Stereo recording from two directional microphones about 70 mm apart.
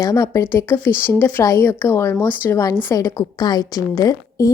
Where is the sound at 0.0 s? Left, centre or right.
Left.